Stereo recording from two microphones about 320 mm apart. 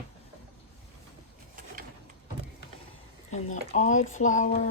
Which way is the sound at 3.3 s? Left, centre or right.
Left.